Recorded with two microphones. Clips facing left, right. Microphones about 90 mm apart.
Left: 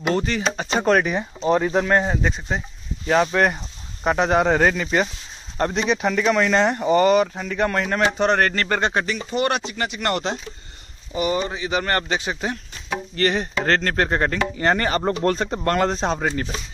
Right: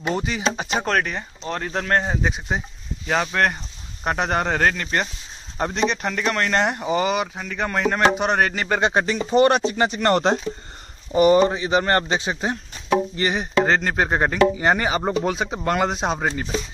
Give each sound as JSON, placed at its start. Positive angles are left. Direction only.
{"t": 0.1, "sound": "speech", "side_deg": -10}
{"t": 0.8, "sound": "speech", "side_deg": 5}
{"t": 3.1, "sound": "speech", "side_deg": 0}
{"t": 8.9, "sound": "speech", "side_deg": -35}
{"t": 13.1, "sound": "speech", "side_deg": -15}